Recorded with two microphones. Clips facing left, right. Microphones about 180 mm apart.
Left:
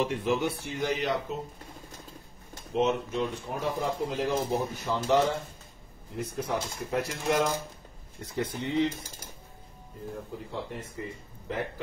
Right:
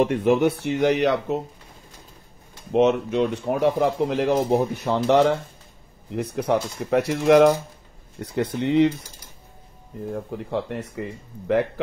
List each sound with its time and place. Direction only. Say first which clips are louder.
0.0 s speech: right 9 dB; 60° right (ahead or behind); by 1.4 s 75° right (ahead or behind)
2.7 s speech: right 8 dB; 70° right (ahead or behind)
10.3 s speech: right 10 dB; 75° right (ahead or behind)